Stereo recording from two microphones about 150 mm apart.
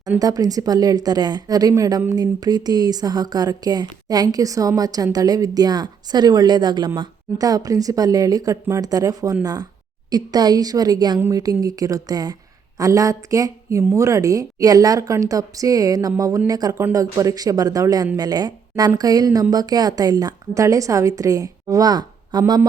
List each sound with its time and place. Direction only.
0.2 s a woman's voice: 25° right (ahead or behind)